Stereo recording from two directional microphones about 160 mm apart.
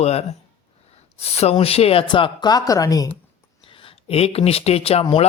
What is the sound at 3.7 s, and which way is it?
Speech, 35° left (ahead or behind).